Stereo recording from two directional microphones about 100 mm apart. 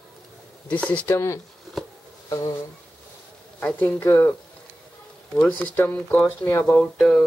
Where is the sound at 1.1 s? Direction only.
30° left (ahead or behind).